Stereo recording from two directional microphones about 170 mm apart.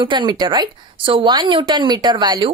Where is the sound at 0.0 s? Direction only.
30° right (ahead or behind).